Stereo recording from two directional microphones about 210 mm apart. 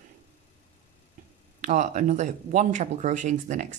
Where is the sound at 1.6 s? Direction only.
35° right (ahead or behind).